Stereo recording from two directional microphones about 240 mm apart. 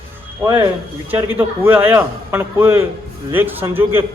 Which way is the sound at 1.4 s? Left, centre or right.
Centre.